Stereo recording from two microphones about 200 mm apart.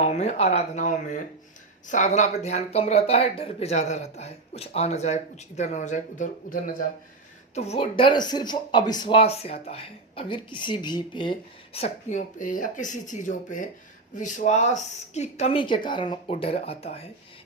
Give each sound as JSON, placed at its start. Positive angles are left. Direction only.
{"t": 0.0, "sound": "speech", "side_deg": 35}